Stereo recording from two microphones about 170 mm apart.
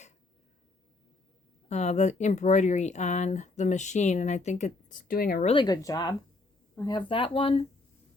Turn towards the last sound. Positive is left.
turn(degrees=30)  # may be behind; listen again after turning